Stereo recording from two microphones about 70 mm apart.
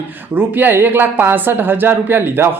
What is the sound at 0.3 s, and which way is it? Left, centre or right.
Speech, right.